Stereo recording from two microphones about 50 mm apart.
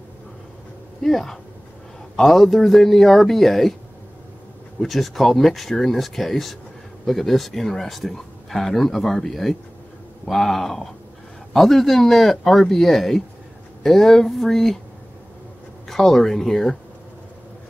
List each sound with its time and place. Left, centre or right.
1.0 s speech: centre
4.7 s speech: centre
15.9 s speech: centre